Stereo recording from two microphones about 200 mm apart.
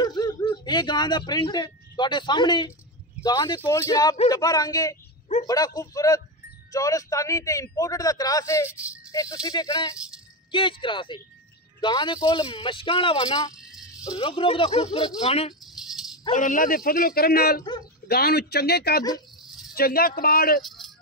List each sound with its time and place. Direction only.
0.0 s a man's voice: 20° left (ahead or behind)
13.6 s rattle: 5° right (ahead or behind)
14.0 s speech: 20° left (ahead or behind)
15.6 s rattle: centre (ahead or behind)
16.3 s a man's voice: 40° left (ahead or behind)